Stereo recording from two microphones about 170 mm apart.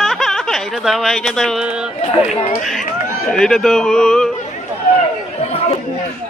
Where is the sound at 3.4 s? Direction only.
5° left (ahead or behind).